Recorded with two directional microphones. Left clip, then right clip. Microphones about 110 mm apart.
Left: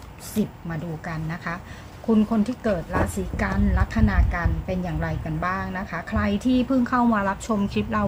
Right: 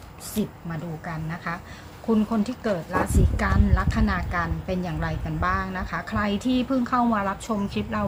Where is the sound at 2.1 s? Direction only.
5° left (ahead or behind).